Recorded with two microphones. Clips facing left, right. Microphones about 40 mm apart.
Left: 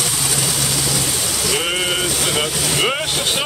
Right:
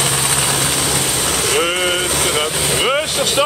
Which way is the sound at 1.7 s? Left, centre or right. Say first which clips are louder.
Right 3 dB; right.